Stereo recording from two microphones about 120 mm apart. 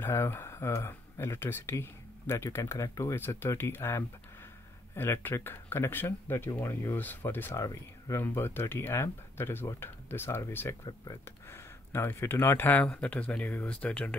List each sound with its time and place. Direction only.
0.0 s speech: 20° left (ahead or behind)